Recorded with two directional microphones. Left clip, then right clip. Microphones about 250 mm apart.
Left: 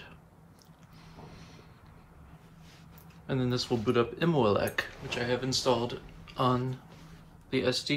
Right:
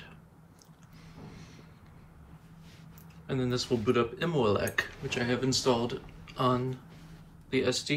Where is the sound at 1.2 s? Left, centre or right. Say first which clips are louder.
Even; centre.